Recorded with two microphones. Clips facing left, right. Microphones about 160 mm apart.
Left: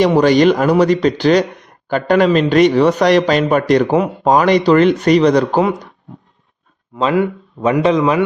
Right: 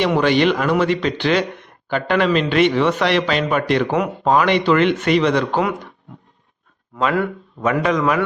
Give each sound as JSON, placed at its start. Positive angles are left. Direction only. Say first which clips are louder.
{"t": 0.0, "sound": "speech", "louder": "left 5 dB", "side_deg": 40}
{"t": 6.9, "sound": "a man's voice", "louder": "left 4 dB", "side_deg": 20}